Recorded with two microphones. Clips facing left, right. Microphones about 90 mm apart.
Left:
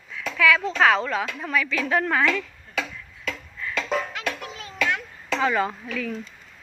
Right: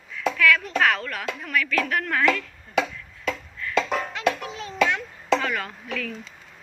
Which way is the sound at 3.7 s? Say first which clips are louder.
Right 2 dB; 5° right (ahead or behind).